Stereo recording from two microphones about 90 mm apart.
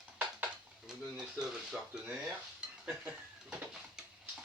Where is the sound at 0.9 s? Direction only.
10° right (ahead or behind).